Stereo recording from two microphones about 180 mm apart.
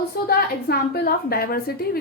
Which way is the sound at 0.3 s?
60° left (ahead or behind).